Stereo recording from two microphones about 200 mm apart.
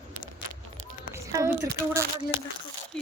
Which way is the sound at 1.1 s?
15° right (ahead or behind).